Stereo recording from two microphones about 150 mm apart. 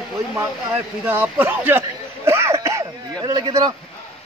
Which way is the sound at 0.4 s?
15° right (ahead or behind).